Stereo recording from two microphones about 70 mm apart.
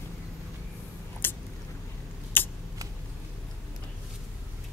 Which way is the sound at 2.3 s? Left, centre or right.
Left.